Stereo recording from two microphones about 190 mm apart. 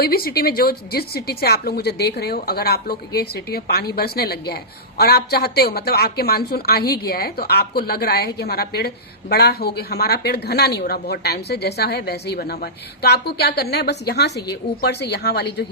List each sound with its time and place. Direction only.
0.0 s a woman's voice: 55° left (ahead or behind)